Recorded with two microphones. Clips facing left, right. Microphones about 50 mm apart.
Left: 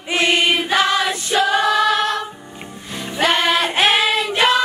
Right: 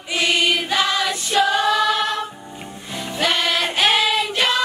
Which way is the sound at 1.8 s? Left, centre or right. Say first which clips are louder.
Left 2 dB; left.